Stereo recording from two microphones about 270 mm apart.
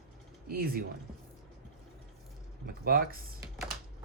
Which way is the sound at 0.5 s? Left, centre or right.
Right.